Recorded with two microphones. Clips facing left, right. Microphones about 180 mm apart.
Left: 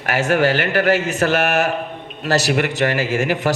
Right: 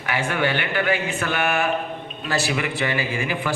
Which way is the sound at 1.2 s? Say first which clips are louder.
Left 6 dB; 80° left.